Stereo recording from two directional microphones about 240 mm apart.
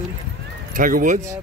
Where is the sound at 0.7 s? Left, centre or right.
Right.